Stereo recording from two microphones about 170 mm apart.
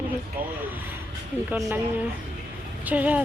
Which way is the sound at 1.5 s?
10° right (ahead or behind).